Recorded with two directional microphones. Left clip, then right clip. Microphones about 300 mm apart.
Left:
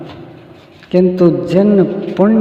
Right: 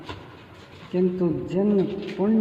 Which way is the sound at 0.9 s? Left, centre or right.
Left.